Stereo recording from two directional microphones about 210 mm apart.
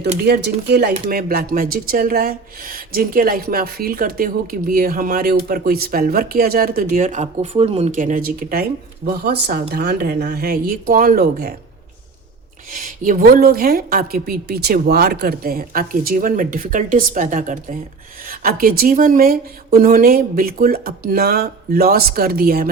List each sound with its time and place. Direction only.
0.3 s speech: 50° right (ahead or behind)
12.7 s speech: 40° right (ahead or behind)
18.3 s a sound: 40° right (ahead or behind)
18.8 s speech: 40° right (ahead or behind)